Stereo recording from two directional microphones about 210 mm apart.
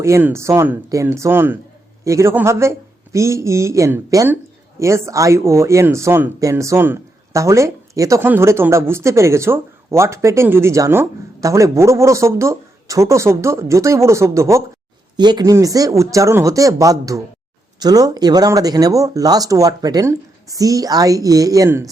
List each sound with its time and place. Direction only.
0.0 s speech: 10° right (ahead or behind)